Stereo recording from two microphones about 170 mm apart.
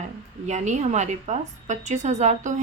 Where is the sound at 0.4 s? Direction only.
45° right (ahead or behind).